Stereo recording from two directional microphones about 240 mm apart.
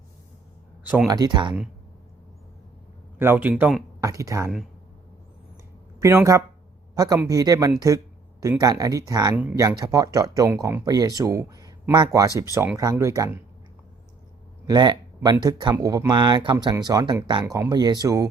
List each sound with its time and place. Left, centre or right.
0.9 s speech: centre
1.1 s speech: centre
3.2 s speech: centre
4.0 s speech: centre
6.0 s speech: centre
14.7 s speech: centre